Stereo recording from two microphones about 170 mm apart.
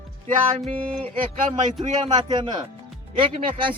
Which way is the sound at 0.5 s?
40° right (ahead or behind).